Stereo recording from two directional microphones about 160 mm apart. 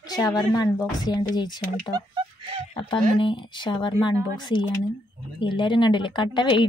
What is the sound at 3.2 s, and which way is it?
A woman's voice, 30° left (ahead or behind).